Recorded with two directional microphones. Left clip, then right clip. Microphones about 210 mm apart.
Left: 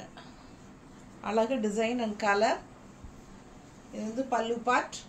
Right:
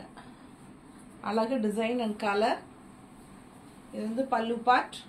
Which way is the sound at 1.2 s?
25° left (ahead or behind).